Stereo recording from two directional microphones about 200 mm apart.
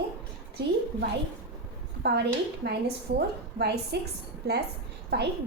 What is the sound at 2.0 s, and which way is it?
A woman's voice, 55° right (ahead or behind).